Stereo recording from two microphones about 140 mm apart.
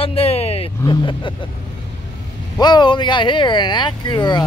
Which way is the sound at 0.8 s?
35° left (ahead or behind).